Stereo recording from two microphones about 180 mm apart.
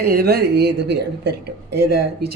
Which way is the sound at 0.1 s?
60° right (ahead or behind).